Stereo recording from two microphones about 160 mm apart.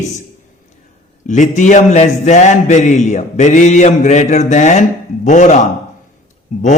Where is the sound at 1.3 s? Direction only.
50° left (ahead or behind).